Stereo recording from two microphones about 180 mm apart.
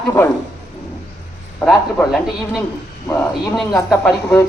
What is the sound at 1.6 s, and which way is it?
Speech, 5° left (ahead or behind).